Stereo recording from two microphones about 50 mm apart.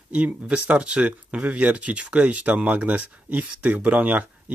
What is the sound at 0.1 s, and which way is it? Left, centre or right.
Speech, right.